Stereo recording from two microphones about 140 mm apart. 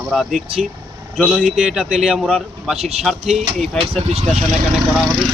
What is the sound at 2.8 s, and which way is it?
Speech, 50° right (ahead or behind).